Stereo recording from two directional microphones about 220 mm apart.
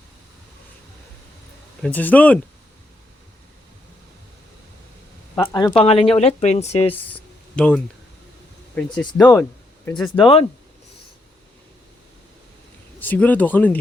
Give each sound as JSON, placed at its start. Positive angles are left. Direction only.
{"t": 1.8, "sound": "speech", "side_deg": 5}
{"t": 5.3, "sound": "speech", "side_deg": 15}
{"t": 6.9, "sound": "speech", "side_deg": 5}
{"t": 9.9, "sound": "speech", "side_deg": 20}
{"t": 13.0, "sound": "speech", "side_deg": 10}